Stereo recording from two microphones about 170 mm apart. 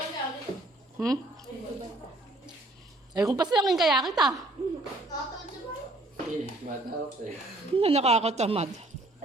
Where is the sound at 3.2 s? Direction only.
25° right (ahead or behind).